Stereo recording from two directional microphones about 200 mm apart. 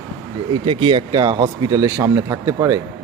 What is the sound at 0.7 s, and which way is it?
Speech, 25° right (ahead or behind).